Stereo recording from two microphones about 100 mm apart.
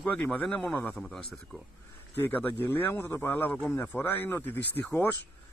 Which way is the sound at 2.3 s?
20° left (ahead or behind).